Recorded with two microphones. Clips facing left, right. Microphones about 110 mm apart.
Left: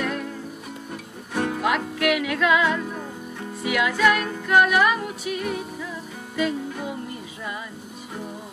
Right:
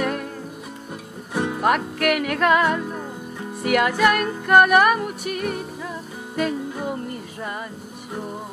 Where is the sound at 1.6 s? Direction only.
50° right (ahead or behind).